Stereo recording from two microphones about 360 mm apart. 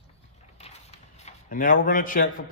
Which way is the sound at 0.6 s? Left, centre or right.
Centre.